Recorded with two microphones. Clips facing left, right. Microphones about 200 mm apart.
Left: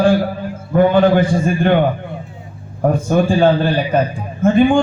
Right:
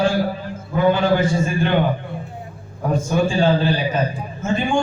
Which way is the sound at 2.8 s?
55° left (ahead or behind).